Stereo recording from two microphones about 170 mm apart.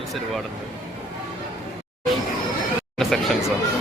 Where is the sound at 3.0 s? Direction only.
Centre (ahead or behind).